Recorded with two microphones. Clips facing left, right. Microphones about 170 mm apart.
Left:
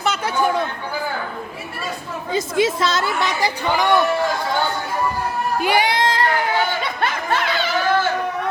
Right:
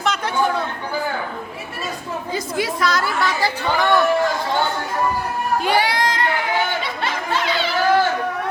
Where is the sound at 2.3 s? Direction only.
25° left (ahead or behind).